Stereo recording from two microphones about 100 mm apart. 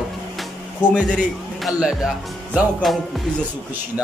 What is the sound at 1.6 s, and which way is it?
Speech, 5° right (ahead or behind).